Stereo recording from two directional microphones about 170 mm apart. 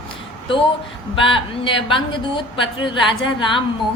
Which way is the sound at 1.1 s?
30° left (ahead or behind).